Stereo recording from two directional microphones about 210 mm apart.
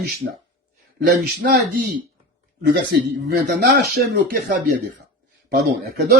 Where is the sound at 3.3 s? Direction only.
50° right (ahead or behind).